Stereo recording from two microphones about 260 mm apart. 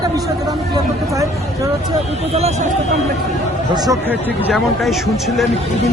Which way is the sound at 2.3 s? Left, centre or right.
Right.